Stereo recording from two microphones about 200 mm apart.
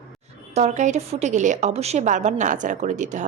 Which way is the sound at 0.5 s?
35° right (ahead or behind).